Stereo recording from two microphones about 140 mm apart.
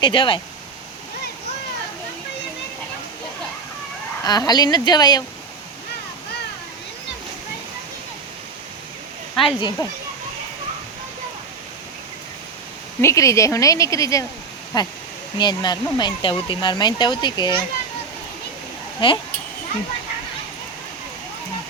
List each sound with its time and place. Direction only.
0.0 s speech: 40° left (ahead or behind)
4.2 s speech: 30° left (ahead or behind)
9.3 s speech: centre (ahead or behind)
9.8 s speech: 25° left (ahead or behind)
13.0 s speech: 20° left (ahead or behind)
18.9 s speech: 30° left (ahead or behind)